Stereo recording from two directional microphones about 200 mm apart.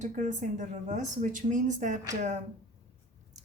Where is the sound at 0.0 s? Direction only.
35° right (ahead or behind).